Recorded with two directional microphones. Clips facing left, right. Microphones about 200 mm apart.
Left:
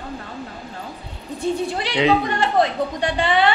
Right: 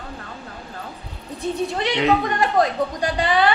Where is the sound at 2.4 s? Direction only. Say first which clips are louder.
Even; 25° left (ahead or behind).